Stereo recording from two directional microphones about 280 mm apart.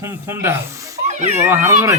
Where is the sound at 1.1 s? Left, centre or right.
Right.